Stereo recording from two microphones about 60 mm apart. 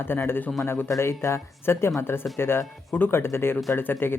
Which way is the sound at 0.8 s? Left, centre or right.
Left.